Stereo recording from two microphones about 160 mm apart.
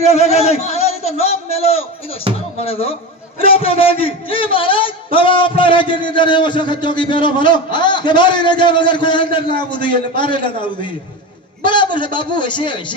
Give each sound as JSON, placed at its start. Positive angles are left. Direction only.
{"t": 0.0, "sound": "a man's voice", "side_deg": 40}